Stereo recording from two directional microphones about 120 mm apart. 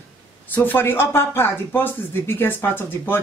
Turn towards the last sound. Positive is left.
turn(degrees=20)  # may be behind; listen again after turning